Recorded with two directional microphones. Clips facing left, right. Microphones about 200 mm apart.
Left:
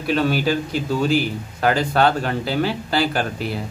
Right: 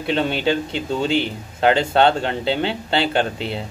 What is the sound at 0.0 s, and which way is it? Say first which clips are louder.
A man's voice: left 1 dB; 25° right (ahead or behind).